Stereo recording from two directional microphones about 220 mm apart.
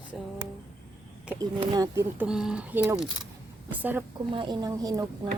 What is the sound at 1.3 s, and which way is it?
Speech, 20° right (ahead or behind).